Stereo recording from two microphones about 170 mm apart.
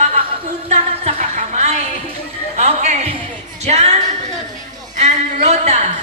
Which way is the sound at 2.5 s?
40° right (ahead or behind).